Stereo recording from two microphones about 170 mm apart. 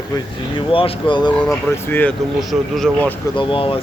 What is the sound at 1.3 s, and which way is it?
Speech, 5° left (ahead or behind).